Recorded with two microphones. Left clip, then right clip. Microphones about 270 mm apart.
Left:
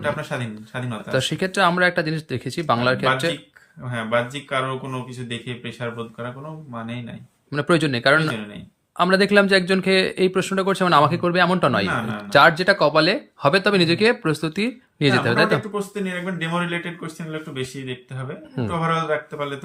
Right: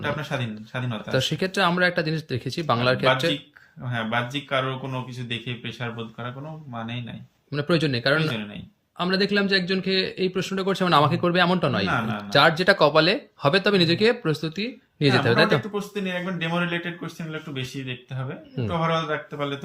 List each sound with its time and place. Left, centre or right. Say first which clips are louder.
0.0 s a man's voice: left 3 dB; centre
7.5 s a man's voice: left 4 dB; centre